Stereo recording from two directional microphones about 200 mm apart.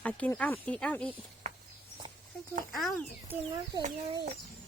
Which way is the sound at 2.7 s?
Centre (ahead or behind).